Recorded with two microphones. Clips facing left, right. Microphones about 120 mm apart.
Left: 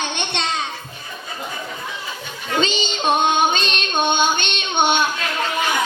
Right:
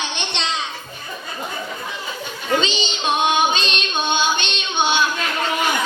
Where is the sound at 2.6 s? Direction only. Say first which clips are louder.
Left 2 dB; 50° left (ahead or behind).